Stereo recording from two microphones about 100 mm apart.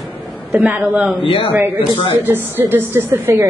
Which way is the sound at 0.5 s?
15° right (ahead or behind).